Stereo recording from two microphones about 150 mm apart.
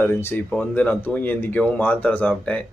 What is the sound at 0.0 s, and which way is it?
Speech, 15° left (ahead or behind).